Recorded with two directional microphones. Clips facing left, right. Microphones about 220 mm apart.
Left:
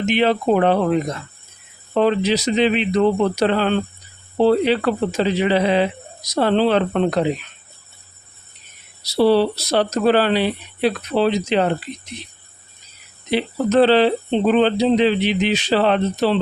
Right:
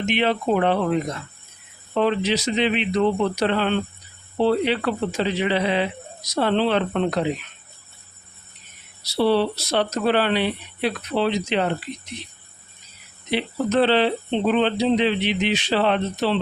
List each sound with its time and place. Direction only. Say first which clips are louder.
0.1 s speech: left 4 dB; 40° left (ahead or behind)
1.9 s speech: left 4 dB; 40° left (ahead or behind)
9.0 s speech: left 4 dB; 40° left (ahead or behind)
13.3 s speech: left 4 dB; 40° left (ahead or behind)